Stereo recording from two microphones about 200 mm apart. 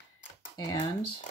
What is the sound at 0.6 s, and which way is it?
Speech, 20° left (ahead or behind).